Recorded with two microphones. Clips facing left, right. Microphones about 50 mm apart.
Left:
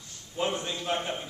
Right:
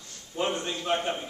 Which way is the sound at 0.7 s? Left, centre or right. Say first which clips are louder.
Right 3 dB; centre.